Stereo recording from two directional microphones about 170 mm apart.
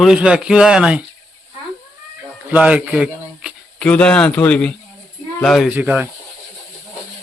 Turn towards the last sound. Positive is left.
turn(degrees=-10)  # may be behind; listen again after turning